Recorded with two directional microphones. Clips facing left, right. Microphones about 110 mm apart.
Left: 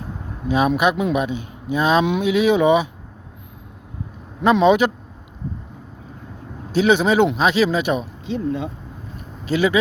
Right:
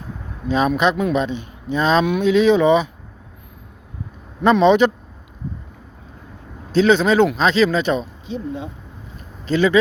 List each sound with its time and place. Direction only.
0.4 s speech: 10° left (ahead or behind)
4.4 s speech: 10° left (ahead or behind)
6.7 s speech: 15° left (ahead or behind)
8.3 s speech: 90° left
9.5 s speech: 10° left (ahead or behind)